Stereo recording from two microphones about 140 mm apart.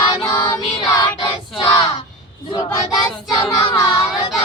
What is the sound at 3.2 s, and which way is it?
Child singing, 25° left (ahead or behind).